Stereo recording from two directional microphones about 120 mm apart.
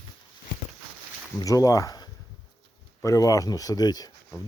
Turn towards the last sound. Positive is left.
turn(degrees=35)  # may be behind; listen again after turning